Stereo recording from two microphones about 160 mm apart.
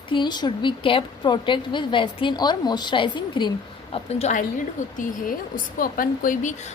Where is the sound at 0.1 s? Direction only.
25° left (ahead or behind).